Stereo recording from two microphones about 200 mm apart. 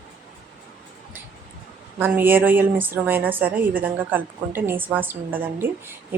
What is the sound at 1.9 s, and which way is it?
A woman's voice, 10° right (ahead or behind).